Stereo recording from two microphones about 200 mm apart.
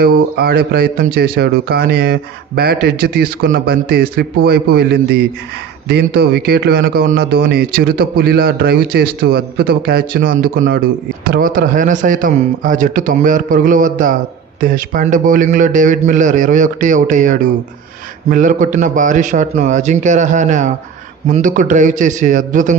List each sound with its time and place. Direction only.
0.0 s speech: 50° right (ahead or behind)